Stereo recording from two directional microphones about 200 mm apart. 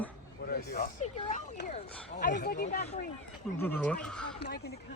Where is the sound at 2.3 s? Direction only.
50° left (ahead or behind).